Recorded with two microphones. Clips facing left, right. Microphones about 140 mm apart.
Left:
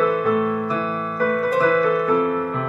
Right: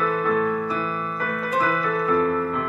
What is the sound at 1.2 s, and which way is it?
Music, 40° left (ahead or behind).